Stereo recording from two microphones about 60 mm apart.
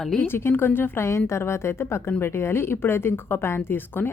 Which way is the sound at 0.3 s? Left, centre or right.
Left.